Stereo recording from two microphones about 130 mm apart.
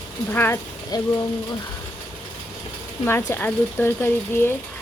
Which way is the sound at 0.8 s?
25° left (ahead or behind).